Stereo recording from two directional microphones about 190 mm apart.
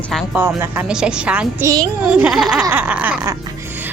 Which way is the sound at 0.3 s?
10° right (ahead or behind).